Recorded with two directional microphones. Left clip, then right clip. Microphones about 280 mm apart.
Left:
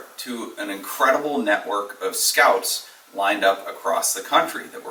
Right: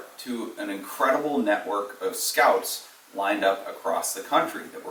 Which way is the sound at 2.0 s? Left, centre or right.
Centre.